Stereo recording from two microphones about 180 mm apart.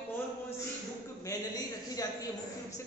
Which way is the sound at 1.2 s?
20° left (ahead or behind).